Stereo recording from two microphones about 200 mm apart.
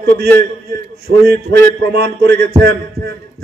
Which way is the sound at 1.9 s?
60° right (ahead or behind).